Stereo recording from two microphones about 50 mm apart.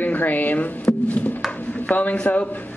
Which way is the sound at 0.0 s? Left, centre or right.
Left.